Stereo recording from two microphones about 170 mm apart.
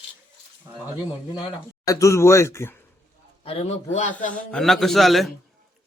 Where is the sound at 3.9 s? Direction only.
50° left (ahead or behind).